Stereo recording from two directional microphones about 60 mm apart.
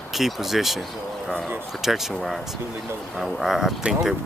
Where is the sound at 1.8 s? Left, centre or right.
Centre.